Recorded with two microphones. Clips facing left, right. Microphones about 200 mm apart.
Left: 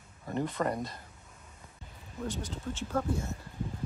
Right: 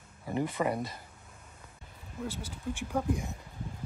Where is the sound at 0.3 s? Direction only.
10° right (ahead or behind).